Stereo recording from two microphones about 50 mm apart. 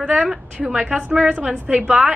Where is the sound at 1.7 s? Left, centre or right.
Centre.